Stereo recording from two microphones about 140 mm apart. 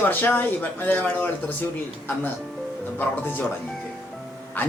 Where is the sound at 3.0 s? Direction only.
15° left (ahead or behind).